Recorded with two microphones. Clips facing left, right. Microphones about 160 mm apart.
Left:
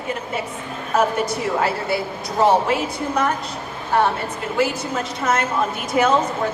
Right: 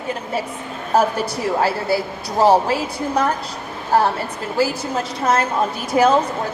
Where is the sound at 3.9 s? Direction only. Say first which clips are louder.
Right 2 dB; 35° right (ahead or behind).